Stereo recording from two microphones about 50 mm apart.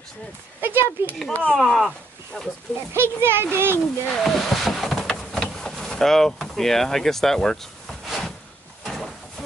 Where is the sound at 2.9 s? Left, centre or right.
Right.